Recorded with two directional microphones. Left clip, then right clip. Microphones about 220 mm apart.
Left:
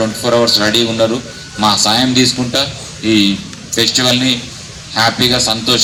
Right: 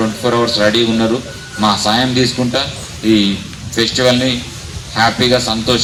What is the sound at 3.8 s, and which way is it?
A man's voice, 50° left (ahead or behind).